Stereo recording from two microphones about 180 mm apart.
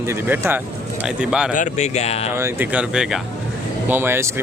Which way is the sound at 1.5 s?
40° left (ahead or behind).